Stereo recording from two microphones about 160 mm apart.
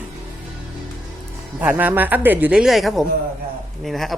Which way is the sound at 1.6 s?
10° right (ahead or behind).